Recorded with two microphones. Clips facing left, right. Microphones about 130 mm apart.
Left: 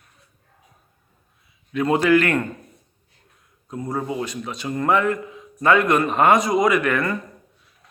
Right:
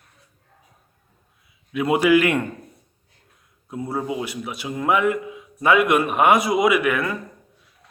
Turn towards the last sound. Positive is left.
turn(degrees=-5)  # may be behind; listen again after turning